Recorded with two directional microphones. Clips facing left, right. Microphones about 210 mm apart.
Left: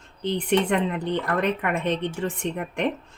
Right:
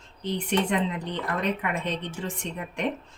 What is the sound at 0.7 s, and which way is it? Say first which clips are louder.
Speech: left 4 dB; 60° left (ahead or behind).